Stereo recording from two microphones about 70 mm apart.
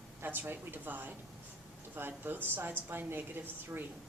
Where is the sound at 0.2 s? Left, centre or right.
Right.